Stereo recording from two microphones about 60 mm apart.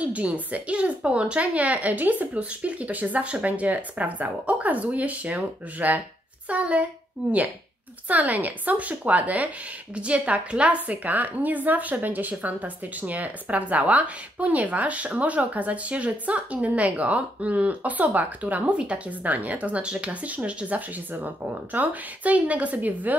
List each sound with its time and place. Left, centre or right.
0.0 s a woman's voice: right